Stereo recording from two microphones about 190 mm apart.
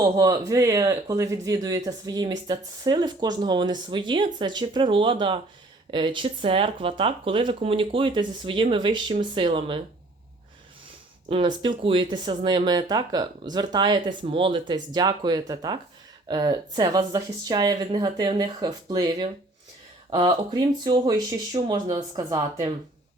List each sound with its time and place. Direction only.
0.0 s speech: 20° right (ahead or behind)
11.3 s speech: 30° right (ahead or behind)